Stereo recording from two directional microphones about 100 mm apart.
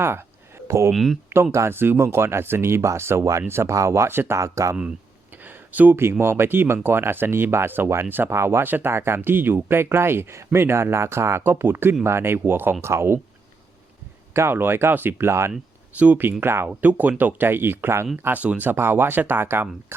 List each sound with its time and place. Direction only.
0.0 s a sound: 25° right (ahead or behind)
0.9 s speech: centre (ahead or behind)
1.5 s speech: 25° right (ahead or behind)
5.3 s speech: 20° right (ahead or behind)
14.3 s speech: 25° right (ahead or behind)